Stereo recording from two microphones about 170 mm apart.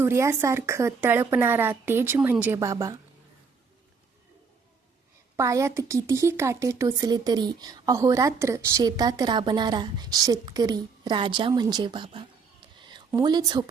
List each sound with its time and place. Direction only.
0.0 s a woman's voice: 15° right (ahead or behind)
5.4 s speech: 15° right (ahead or behind)